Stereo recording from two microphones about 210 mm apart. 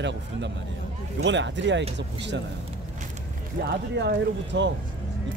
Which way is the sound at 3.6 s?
55° right (ahead or behind).